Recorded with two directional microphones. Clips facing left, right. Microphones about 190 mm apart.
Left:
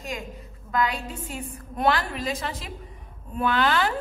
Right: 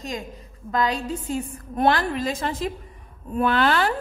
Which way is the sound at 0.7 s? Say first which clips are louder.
Right 3 dB; 40° right (ahead or behind).